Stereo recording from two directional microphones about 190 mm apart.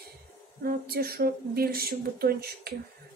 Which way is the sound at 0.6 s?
55° right (ahead or behind).